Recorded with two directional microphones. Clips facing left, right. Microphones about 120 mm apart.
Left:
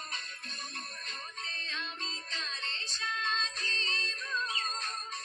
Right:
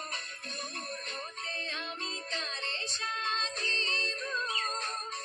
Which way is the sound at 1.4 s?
45° right (ahead or behind).